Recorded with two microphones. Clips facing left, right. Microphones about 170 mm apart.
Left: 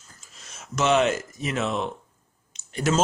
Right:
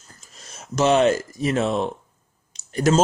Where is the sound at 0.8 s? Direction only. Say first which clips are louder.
Right 4 dB; 35° right (ahead or behind).